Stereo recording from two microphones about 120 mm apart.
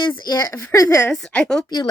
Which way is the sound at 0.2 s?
35° left (ahead or behind).